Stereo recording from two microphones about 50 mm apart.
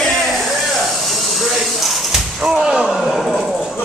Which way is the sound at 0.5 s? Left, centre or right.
Centre.